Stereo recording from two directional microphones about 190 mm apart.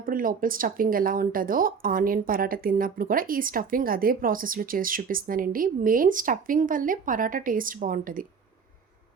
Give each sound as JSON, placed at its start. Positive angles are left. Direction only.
{"t": 0.0, "sound": "speech", "side_deg": -45}